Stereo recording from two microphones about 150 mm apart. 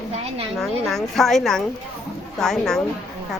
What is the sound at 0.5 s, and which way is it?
A woman's voice, centre (ahead or behind).